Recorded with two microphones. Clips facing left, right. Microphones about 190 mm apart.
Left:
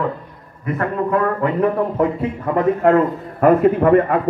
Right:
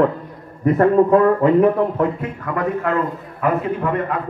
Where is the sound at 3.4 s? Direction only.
55° left (ahead or behind).